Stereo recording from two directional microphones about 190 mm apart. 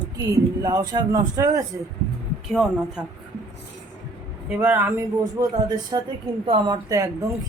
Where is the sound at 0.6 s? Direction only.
20° right (ahead or behind).